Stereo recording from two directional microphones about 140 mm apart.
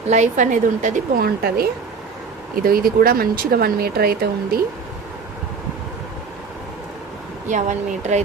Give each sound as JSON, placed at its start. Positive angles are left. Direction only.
{"t": 0.1, "sound": "a woman's voice", "side_deg": -60}
{"t": 7.4, "sound": "speech", "side_deg": -60}